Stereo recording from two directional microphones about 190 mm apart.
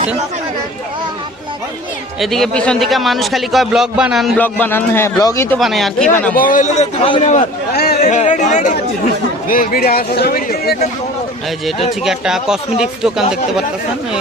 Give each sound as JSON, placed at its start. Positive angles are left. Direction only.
{"t": 2.2, "sound": "a man's voice", "side_deg": 0}
{"t": 4.4, "sound": "a man's voice", "side_deg": 10}
{"t": 5.5, "sound": "a man's voice", "side_deg": 0}
{"t": 6.3, "sound": "a man's voice", "side_deg": 45}
{"t": 7.7, "sound": "chatter", "side_deg": 60}
{"t": 8.0, "sound": "speech", "side_deg": 40}
{"t": 12.0, "sound": "a man's voice", "side_deg": -5}